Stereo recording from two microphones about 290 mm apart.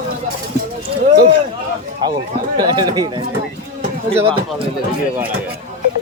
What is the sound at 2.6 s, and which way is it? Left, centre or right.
A man's voice, centre.